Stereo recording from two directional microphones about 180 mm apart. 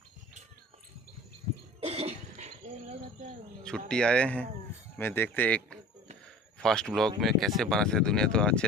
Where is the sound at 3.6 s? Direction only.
5° left (ahead or behind).